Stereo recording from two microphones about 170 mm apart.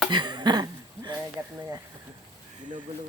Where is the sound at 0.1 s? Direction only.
25° right (ahead or behind).